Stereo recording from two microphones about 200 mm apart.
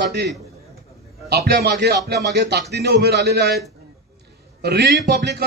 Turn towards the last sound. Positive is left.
turn(degrees=-55)  # may be behind; listen again after turning